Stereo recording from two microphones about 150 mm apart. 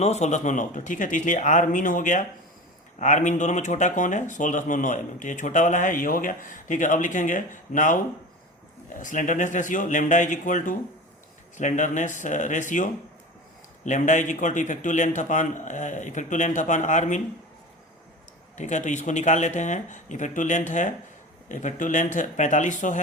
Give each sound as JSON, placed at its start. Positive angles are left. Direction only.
{"t": 0.0, "sound": "speech", "side_deg": 50}
{"t": 18.5, "sound": "speech", "side_deg": 55}